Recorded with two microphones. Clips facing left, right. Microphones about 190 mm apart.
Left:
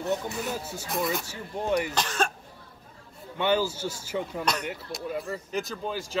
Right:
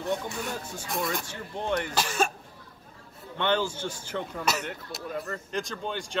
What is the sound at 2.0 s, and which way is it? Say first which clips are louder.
Speech: right 1 dB; 10° right (ahead or behind).